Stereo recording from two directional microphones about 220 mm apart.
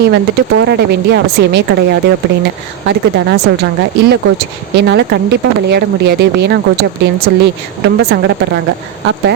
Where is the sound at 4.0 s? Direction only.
50° right (ahead or behind).